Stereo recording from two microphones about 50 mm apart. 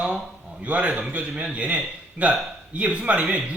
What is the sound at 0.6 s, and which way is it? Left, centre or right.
A man's voice, right.